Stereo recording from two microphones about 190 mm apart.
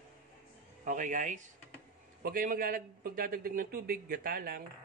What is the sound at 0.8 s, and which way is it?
A man's voice, 45° right (ahead or behind).